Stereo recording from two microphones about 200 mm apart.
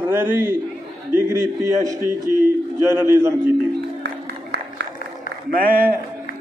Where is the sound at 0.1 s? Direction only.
10° right (ahead or behind).